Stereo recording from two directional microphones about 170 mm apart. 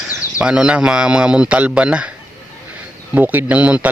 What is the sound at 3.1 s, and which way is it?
Speech, 10° right (ahead or behind).